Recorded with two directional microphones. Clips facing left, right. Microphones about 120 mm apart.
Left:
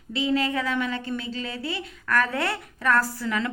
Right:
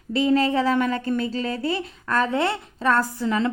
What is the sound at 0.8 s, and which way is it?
A woman's voice, 45° right (ahead or behind).